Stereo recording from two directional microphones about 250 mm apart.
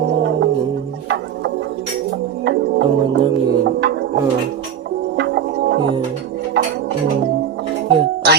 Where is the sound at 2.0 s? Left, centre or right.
Right.